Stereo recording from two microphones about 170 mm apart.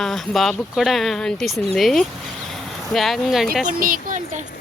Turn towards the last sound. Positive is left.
turn(degrees=-55)  # may be behind; listen again after turning